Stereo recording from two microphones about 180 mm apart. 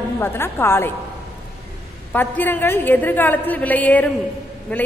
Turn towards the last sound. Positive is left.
turn(degrees=10)  # may be behind; listen again after turning